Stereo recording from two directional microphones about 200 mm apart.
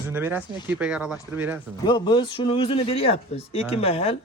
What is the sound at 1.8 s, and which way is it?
A man's voice, 20° left (ahead or behind).